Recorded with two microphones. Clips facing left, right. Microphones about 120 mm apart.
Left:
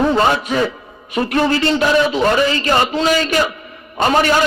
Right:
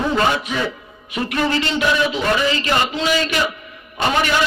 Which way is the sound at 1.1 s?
40° left (ahead or behind).